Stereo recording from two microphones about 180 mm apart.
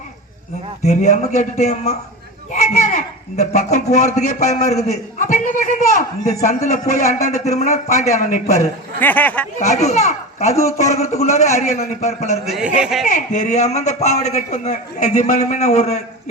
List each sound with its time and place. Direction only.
0.9 s a man's voice: 40° left (ahead or behind)
9.0 s speech: 10° left (ahead or behind)
9.6 s a man's voice: 40° left (ahead or behind)
12.5 s speech: 5° right (ahead or behind)
13.1 s a man's voice: 45° left (ahead or behind)